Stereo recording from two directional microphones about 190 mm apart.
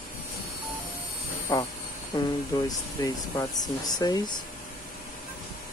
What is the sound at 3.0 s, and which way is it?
Speech, 20° left (ahead or behind).